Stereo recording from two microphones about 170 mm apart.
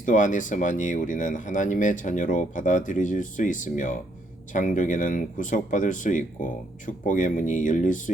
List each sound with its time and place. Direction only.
0.0 s speech: 50° left (ahead or behind)